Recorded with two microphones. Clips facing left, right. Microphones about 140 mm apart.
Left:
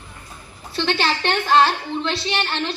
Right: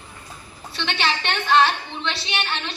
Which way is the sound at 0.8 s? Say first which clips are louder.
Left 4 dB; 35° left (ahead or behind).